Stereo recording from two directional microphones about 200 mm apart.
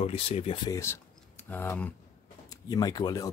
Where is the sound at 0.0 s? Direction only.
30° left (ahead or behind).